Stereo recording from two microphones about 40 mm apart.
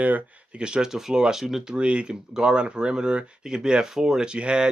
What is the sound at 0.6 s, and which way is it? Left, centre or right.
Speech, right.